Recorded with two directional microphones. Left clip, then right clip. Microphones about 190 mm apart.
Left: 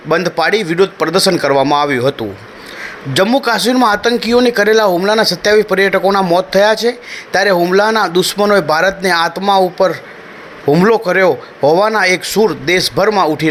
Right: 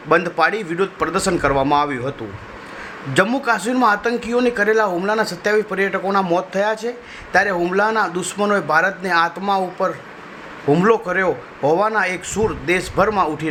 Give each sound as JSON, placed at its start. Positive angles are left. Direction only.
{"t": 0.1, "sound": "a man's voice", "side_deg": 20}
{"t": 3.8, "sound": "a man's voice", "side_deg": 20}